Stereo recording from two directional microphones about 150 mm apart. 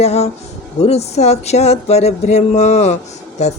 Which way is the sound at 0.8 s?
45° left (ahead or behind).